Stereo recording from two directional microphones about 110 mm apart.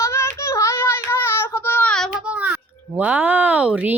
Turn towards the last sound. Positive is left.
turn(degrees=-10)  # may be behind; listen again after turning